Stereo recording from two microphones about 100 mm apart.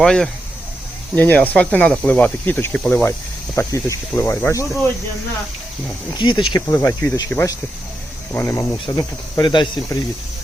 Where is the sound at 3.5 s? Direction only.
30° left (ahead or behind).